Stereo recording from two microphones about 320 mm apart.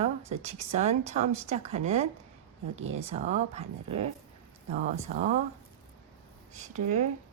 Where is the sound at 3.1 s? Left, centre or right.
Right.